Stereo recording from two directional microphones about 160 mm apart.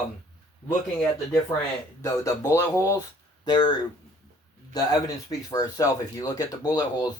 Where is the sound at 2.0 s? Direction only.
15° left (ahead or behind).